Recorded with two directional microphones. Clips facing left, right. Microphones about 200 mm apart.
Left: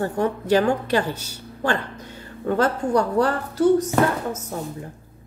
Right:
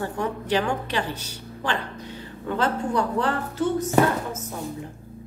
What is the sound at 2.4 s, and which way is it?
A woman's voice, 45° left (ahead or behind).